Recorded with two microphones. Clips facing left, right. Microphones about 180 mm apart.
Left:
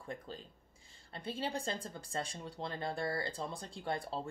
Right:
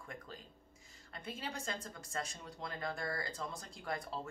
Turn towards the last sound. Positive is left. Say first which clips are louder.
# left 3 dB
turn(degrees=30)  # may be behind; listen again after turning